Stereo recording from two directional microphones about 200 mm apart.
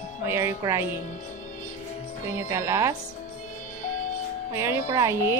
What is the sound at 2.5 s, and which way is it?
Speech, 15° right (ahead or behind).